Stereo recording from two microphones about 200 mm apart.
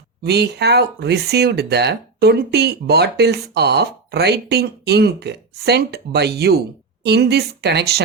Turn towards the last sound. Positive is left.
turn(degrees=-55)  # may be behind; listen again after turning